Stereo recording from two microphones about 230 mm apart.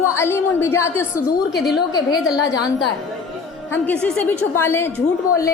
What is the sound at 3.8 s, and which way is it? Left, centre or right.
A woman's voice, centre.